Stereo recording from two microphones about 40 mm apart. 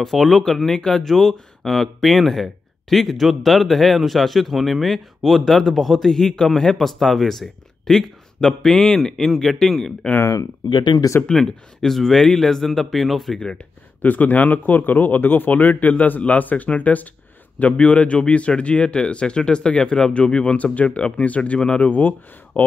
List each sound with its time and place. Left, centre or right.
0.0 s speech: centre
11.2 s speech: centre
14.0 s speech: left
21.8 s speech: left